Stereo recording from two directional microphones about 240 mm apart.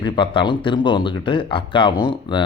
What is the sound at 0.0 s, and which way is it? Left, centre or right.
Speech, centre.